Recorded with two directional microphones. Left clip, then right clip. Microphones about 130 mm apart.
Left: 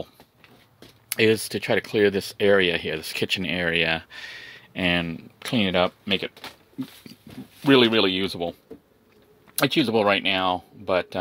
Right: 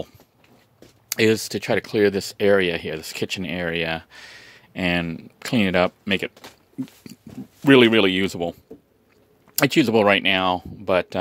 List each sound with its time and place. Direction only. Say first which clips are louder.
0.7 s speech: right 1 dB; 30° right (ahead or behind)
7.6 s speech: right 3 dB; 50° right (ahead or behind)
9.6 s speech: right 3 dB; 50° right (ahead or behind)